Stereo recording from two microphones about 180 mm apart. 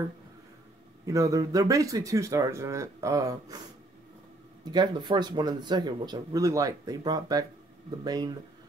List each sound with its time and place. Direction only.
1.0 s speech: 20° right (ahead or behind)
4.6 s speech: 25° right (ahead or behind)